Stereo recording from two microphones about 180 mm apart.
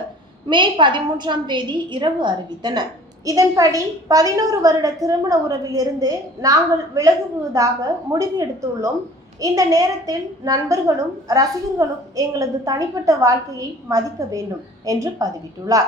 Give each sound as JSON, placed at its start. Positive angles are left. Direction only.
{"t": 0.5, "sound": "a woman's voice", "side_deg": -25}